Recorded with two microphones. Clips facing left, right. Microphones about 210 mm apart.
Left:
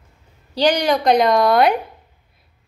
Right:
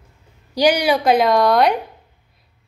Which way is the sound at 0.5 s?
10° right (ahead or behind).